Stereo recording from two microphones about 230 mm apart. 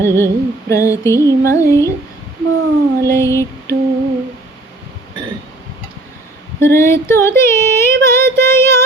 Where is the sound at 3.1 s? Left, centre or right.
Centre.